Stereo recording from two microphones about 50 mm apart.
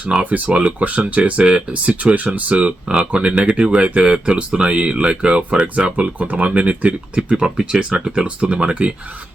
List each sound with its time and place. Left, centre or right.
0.1 s speech: right